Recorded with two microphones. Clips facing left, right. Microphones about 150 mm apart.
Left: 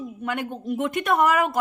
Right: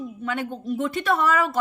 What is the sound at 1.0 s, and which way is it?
Speech, 20° left (ahead or behind).